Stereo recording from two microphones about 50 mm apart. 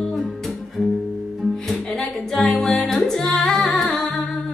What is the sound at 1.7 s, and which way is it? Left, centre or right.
Music, centre.